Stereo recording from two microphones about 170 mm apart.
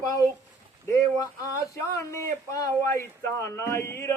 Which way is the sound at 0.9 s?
20° left (ahead or behind).